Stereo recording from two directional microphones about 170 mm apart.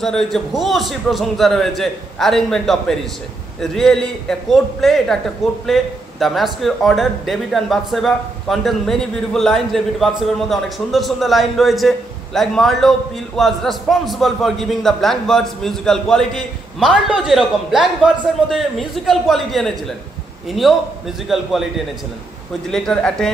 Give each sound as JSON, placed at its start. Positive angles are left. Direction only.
{"t": 0.0, "sound": "a man's voice", "side_deg": 0}